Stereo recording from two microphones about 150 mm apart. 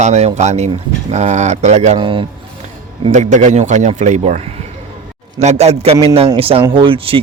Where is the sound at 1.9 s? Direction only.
35° right (ahead or behind).